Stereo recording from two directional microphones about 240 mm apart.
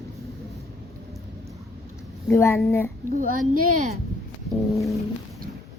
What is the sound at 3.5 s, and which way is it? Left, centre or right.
Speech, right.